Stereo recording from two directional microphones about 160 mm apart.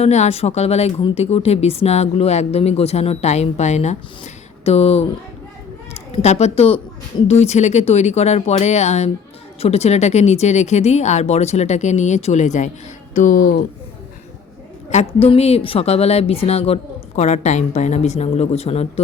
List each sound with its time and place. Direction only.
0.0 s a woman's voice: 45° left (ahead or behind)
6.1 s a woman's voice: 45° left (ahead or behind); by 13.7 s 60° left (ahead or behind)
14.8 s a woman's voice: 40° left (ahead or behind)